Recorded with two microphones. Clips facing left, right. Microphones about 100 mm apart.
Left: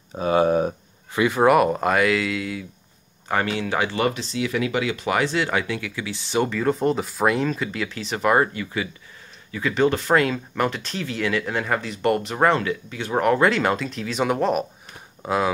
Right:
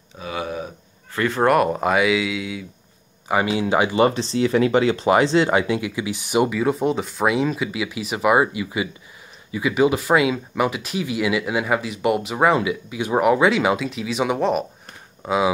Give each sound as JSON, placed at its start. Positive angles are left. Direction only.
{"t": 0.2, "sound": "a sound", "side_deg": 40}
{"t": 1.1, "sound": "speech", "side_deg": 10}
{"t": 4.1, "sound": "speech", "side_deg": -35}